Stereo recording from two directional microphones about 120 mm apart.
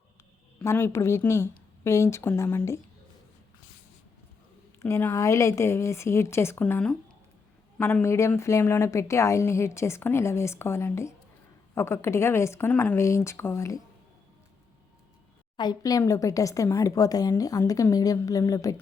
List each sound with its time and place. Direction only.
0.6 s a woman's voice: 25° left (ahead or behind)
4.8 s a woman's voice: 20° left (ahead or behind)
13.0 s a woman's voice: 25° left (ahead or behind)
15.5 s a woman's voice: 35° left (ahead or behind)